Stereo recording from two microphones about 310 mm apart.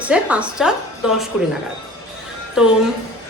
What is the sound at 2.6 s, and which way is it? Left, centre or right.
Speech, centre.